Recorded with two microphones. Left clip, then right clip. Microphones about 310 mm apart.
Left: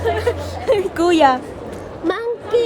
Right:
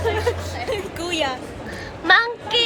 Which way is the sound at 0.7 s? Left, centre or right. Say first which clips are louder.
Left 11 dB; left.